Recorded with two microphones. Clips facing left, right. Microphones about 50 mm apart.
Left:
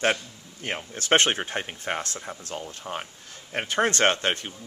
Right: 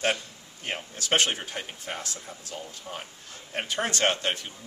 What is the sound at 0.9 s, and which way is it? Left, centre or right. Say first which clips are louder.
Speech: left 4 dB; left.